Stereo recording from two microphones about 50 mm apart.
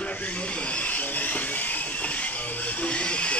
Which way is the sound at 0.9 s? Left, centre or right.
Left.